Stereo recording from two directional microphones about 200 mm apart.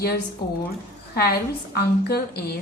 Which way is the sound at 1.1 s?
50° left (ahead or behind).